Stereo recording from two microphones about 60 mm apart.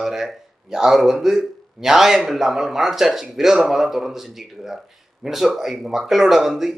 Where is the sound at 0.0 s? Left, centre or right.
Centre.